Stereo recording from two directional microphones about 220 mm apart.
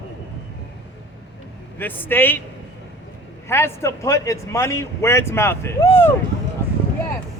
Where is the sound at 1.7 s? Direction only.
10° left (ahead or behind).